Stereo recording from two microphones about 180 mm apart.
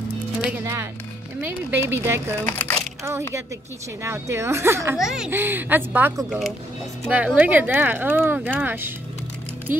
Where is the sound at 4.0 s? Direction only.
15° right (ahead or behind).